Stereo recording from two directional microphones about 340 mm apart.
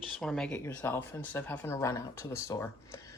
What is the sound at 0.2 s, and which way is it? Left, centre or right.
Speech, centre.